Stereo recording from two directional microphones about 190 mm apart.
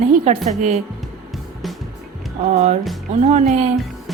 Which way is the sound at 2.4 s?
35° right (ahead or behind).